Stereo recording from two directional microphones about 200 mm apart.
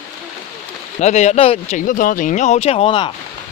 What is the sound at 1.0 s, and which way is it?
Speech, 35° left (ahead or behind).